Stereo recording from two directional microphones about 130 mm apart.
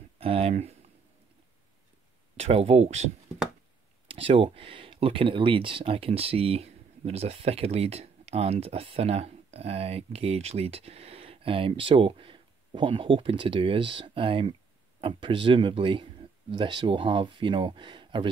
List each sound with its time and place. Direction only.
0.2 s speech: 50° right (ahead or behind)
2.3 s speech: 55° right (ahead or behind)
4.1 s speech: 45° right (ahead or behind)